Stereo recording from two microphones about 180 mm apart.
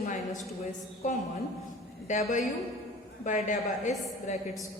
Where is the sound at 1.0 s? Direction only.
45° left (ahead or behind).